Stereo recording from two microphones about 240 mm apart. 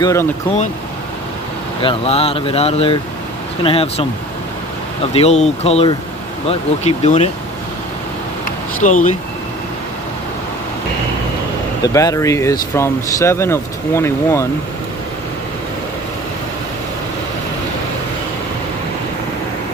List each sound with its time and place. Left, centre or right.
0.0 s speech: centre
1.8 s speech: left
5.1 s speech: left
8.8 s speech: left
11.8 s speech: centre